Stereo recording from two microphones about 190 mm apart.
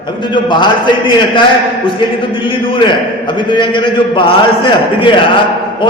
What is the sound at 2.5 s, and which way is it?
A man's voice, 25° left (ahead or behind).